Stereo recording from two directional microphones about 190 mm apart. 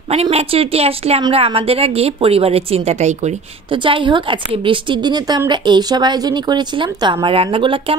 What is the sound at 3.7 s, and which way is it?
A woman's voice, 25° right (ahead or behind).